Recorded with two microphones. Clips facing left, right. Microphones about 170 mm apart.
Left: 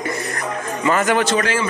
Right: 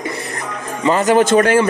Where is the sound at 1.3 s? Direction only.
55° right (ahead or behind).